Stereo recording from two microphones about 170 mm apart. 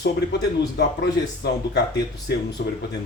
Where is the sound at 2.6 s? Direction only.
65° left (ahead or behind).